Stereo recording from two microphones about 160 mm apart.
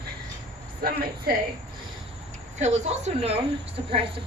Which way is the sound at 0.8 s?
70° right (ahead or behind).